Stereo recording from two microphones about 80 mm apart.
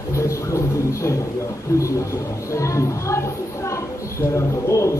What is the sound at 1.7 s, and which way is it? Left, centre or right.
A man's voice, left.